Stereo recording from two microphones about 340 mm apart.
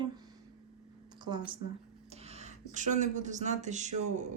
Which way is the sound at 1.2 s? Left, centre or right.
Centre.